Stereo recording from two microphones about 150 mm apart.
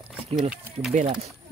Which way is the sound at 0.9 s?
50° right (ahead or behind).